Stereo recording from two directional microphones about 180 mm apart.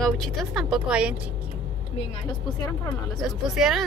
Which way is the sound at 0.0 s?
Centre (ahead or behind).